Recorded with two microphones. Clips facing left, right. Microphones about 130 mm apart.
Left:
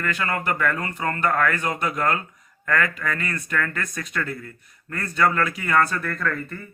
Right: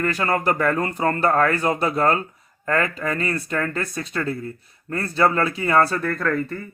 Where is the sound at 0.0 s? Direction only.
35° right (ahead or behind).